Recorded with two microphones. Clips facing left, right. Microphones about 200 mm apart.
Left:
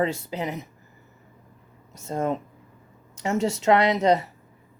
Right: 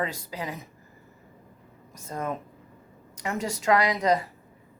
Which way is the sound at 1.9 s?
25° left (ahead or behind).